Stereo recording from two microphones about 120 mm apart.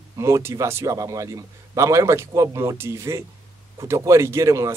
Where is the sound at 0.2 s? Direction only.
25° right (ahead or behind).